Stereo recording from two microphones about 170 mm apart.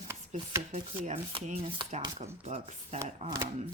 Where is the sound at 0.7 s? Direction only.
35° right (ahead or behind).